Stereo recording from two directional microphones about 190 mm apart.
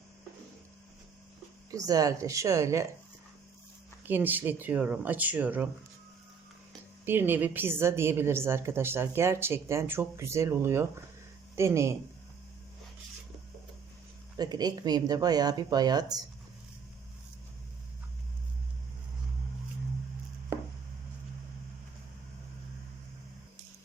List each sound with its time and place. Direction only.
1.7 s a woman's voice: 20° right (ahead or behind)
4.0 s a woman's voice: 10° right (ahead or behind)
7.0 s a woman's voice: 10° right (ahead or behind)
14.3 s speech: 20° right (ahead or behind)